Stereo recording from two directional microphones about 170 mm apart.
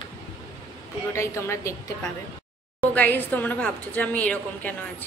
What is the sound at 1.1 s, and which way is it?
Speech, 15° left (ahead or behind).